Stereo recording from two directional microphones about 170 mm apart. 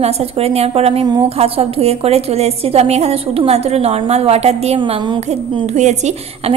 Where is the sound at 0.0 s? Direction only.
40° right (ahead or behind).